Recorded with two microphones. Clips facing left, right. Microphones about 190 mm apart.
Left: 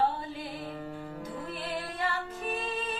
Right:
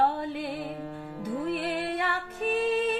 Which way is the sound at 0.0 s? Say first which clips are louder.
Right 4 dB; 60° right (ahead or behind).